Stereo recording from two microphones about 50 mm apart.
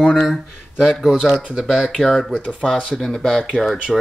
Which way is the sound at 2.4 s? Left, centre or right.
Right.